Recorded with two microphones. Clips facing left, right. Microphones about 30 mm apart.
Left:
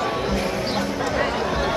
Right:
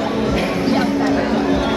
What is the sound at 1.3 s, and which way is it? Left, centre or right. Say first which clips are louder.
Run: right 6 dB; centre.